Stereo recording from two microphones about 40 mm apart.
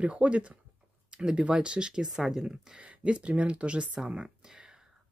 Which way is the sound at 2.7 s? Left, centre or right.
Right.